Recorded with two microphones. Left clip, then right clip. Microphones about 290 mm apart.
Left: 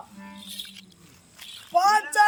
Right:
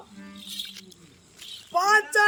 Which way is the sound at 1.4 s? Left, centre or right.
Centre.